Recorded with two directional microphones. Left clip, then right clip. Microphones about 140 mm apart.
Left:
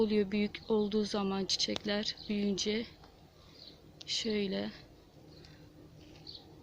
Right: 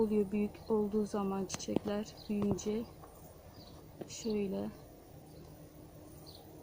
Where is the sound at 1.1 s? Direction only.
25° left (ahead or behind).